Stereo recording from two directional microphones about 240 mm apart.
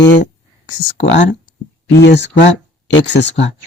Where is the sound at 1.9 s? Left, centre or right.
Left.